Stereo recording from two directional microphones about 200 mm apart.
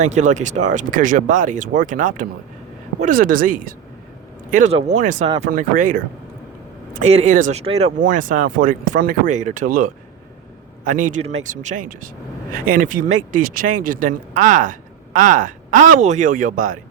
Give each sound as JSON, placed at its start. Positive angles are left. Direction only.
{"t": 0.0, "sound": "speech", "side_deg": -35}